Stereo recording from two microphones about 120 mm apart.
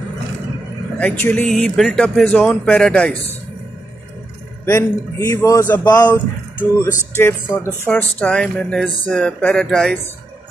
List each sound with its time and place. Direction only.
0.9 s speech: 10° left (ahead or behind)
4.6 s a man's voice: 25° left (ahead or behind); by 9.9 s 5° left (ahead or behind)